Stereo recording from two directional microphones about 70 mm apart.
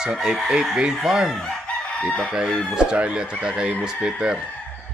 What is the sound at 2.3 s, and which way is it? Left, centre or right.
Speech, centre.